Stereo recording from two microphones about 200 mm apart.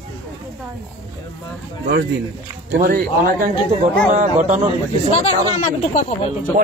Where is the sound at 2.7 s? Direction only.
50° right (ahead or behind).